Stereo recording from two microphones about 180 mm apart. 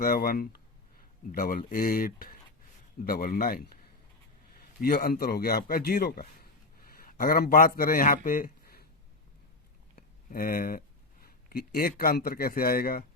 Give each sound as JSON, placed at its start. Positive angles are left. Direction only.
{"t": 0.0, "sound": "speech", "side_deg": 55}
{"t": 4.8, "sound": "speech", "side_deg": 55}
{"t": 9.9, "sound": "speech", "side_deg": 55}